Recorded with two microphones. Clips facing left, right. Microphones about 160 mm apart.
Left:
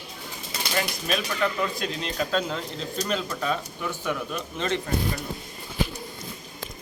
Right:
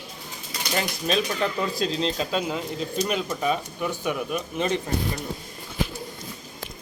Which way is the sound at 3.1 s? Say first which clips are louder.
Even; 15° right (ahead or behind).